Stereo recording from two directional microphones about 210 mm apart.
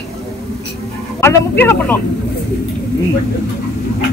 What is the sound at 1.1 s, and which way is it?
Speech, 10° left (ahead or behind).